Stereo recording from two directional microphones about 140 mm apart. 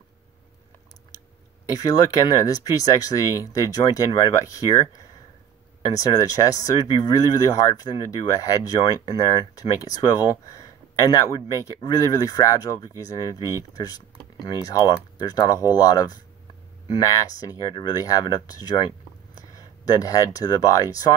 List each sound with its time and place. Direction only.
1.7 s speech: 25° left (ahead or behind)